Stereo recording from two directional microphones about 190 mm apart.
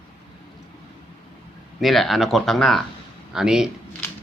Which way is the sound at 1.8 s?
Centre (ahead or behind).